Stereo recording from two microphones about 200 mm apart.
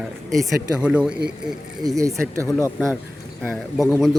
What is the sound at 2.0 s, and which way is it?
Speech, 15° right (ahead or behind).